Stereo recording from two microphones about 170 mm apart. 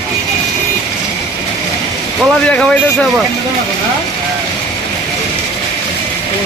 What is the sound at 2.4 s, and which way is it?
Speech, 5° left (ahead or behind).